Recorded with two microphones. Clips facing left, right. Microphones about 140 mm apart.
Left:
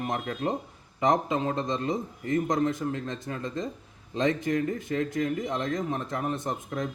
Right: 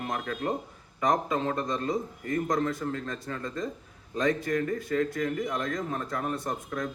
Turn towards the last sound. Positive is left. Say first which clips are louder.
# left 1 dB
turn(degrees=20)  # may be behind; listen again after turning